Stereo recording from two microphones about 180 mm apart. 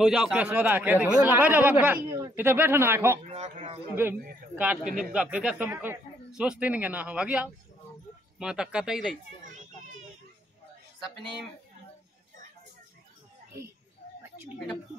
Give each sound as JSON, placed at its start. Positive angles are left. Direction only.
{"t": 0.0, "sound": "speech", "side_deg": -5}
{"t": 2.0, "sound": "speech", "side_deg": -20}
{"t": 3.3, "sound": "a sound", "side_deg": -35}
{"t": 3.9, "sound": "speech", "side_deg": -10}